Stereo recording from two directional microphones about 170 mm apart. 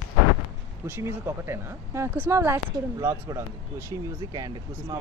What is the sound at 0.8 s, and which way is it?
Speech, 15° right (ahead or behind).